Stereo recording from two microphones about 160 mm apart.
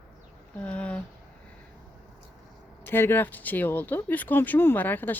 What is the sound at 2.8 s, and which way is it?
Speech, 15° left (ahead or behind).